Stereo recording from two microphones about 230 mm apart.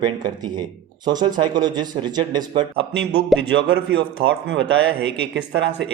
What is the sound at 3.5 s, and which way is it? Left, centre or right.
Speech, right.